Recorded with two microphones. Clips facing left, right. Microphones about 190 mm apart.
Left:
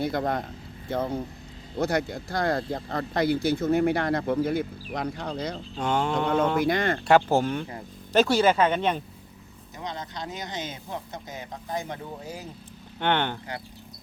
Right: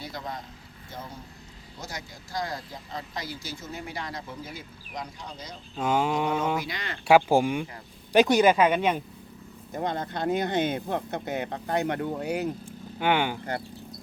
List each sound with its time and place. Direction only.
0.0 s speech: 55° left (ahead or behind)
5.7 s speech: 5° right (ahead or behind)
6.6 s speech: 50° left (ahead or behind)
7.1 s speech: 10° right (ahead or behind)
9.7 s speech: 55° right (ahead or behind); by 12.5 s 70° right (ahead or behind)
13.0 s speech: 10° right (ahead or behind)